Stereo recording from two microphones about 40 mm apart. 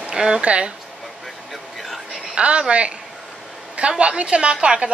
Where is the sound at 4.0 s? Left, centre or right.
Right.